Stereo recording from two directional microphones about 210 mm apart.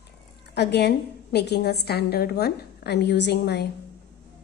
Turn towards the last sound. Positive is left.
turn(degrees=50)  # may be behind; listen again after turning